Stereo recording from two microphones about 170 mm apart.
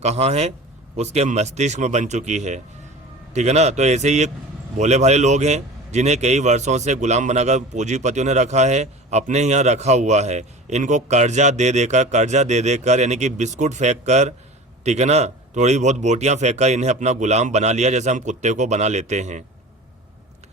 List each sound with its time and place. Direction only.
0.0 s a man's voice: 40° right (ahead or behind)